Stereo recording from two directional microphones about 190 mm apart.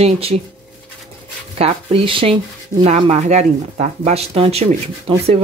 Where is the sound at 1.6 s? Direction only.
30° right (ahead or behind).